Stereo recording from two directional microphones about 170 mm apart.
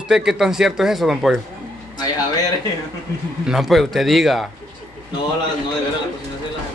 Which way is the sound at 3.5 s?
Centre (ahead or behind).